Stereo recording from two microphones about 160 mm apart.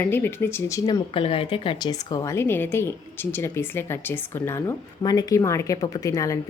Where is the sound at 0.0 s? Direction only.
15° left (ahead or behind).